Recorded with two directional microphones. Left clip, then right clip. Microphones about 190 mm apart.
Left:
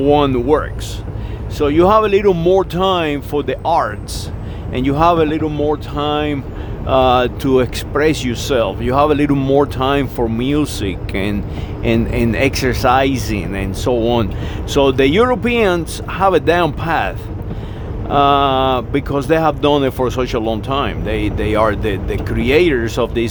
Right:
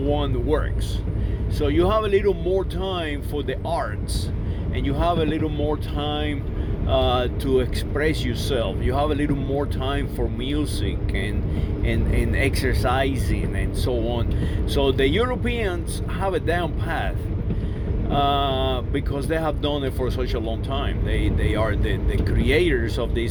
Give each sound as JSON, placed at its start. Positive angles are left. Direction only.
{"t": 0.2, "sound": "speech", "side_deg": 30}